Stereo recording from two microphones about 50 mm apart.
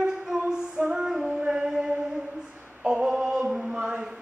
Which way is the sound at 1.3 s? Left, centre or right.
Right.